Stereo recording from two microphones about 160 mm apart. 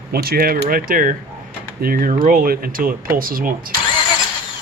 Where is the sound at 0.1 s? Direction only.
70° right (ahead or behind).